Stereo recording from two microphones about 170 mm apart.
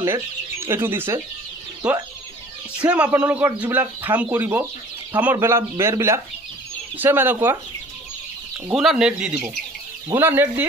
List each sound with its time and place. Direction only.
0.0 s speech: 15° right (ahead or behind)
2.8 s speech: 5° right (ahead or behind)
8.7 s speech: 5° right (ahead or behind)